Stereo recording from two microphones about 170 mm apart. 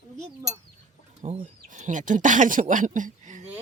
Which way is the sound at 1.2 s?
35° right (ahead or behind).